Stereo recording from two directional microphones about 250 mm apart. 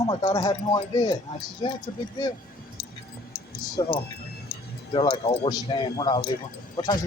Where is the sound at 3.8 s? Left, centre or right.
Centre.